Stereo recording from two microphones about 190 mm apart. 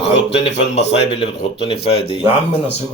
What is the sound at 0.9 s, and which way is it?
A man's voice, 30° left (ahead or behind).